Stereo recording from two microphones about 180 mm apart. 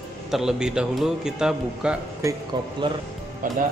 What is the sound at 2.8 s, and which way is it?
Speech, 25° right (ahead or behind).